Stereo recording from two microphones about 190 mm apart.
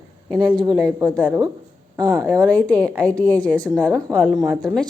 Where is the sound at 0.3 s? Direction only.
20° right (ahead or behind).